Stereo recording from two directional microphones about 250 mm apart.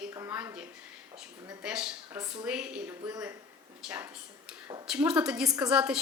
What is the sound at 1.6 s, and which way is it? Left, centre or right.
A woman's voice, centre.